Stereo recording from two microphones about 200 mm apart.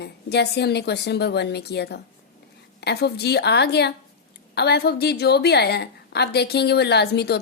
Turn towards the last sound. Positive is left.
turn(degrees=55)  # may be behind; listen again after turning